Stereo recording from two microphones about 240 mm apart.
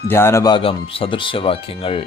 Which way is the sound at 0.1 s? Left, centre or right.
Centre.